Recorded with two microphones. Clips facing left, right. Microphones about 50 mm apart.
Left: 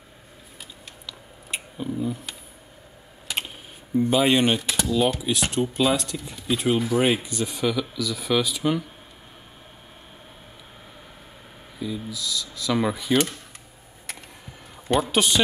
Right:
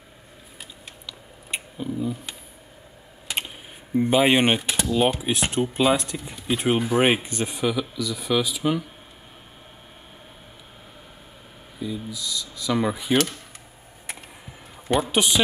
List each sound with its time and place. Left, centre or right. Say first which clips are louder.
1.0 s a sound: even; centre
3.3 s typing: even; centre
3.9 s speech: right 1 dB; right
7.5 s speech: even; centre
11.8 s speech: even; centre
15.0 s speech: even; centre